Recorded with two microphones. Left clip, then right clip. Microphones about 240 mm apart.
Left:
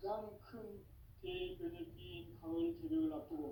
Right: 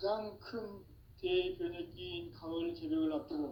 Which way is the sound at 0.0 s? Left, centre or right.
Right.